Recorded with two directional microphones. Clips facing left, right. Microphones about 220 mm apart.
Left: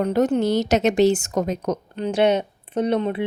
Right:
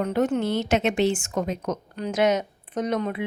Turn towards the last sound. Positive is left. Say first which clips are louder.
# left 5 dB
turn(degrees=30)  # may be behind; listen again after turning